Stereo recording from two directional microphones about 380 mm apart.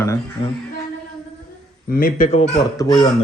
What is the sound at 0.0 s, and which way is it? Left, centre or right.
Speech, centre.